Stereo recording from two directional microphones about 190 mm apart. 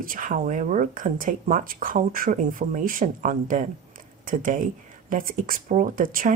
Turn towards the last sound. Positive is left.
turn(degrees=-45)  # may be behind; listen again after turning